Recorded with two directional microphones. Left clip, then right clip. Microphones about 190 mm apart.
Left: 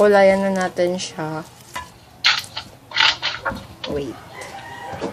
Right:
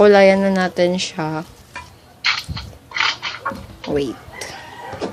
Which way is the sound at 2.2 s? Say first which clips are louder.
Left 2 dB; 25° left (ahead or behind).